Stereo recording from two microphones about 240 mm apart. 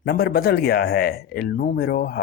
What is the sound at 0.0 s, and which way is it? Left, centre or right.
Speech, left.